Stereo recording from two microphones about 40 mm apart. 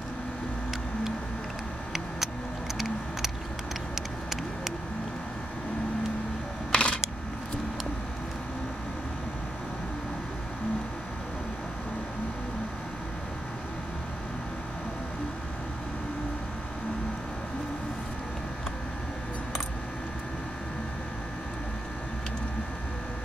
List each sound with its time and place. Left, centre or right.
6.7 s camera: left